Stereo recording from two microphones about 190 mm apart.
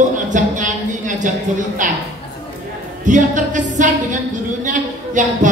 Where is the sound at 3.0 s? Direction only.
40° right (ahead or behind).